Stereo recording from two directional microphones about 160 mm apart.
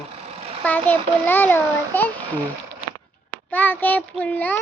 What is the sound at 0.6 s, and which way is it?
A child's voice, 10° left (ahead or behind).